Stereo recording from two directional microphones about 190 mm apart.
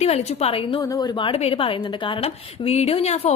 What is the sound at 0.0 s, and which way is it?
A woman's voice, 30° left (ahead or behind).